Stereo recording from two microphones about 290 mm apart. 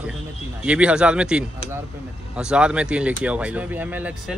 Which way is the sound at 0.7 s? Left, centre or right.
Centre.